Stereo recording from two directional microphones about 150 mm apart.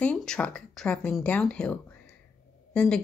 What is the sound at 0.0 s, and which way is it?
A woman's voice, 5° left (ahead or behind).